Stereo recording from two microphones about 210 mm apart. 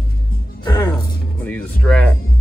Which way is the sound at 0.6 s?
20° left (ahead or behind).